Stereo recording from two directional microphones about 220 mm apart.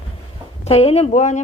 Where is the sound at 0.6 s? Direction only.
30° left (ahead or behind).